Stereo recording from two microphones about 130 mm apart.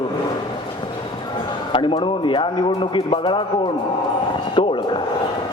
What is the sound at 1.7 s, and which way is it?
A man's voice, 45° left (ahead or behind).